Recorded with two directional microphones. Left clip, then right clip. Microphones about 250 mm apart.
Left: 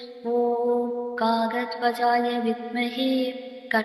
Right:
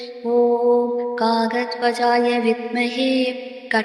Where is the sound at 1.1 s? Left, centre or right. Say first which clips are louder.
Right 3 dB; right.